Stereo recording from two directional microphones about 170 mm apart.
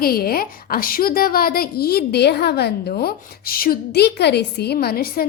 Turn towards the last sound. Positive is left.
turn(degrees=65)  # may be behind; listen again after turning